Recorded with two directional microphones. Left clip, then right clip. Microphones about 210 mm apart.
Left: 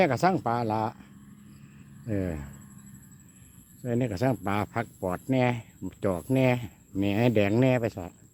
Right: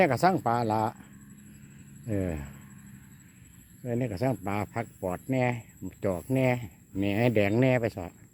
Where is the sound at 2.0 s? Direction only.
Centre (ahead or behind).